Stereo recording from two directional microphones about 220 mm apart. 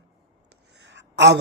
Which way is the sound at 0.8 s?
55° right (ahead or behind).